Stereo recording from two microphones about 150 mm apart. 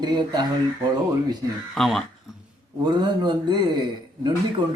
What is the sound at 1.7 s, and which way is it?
Speech, centre (ahead or behind).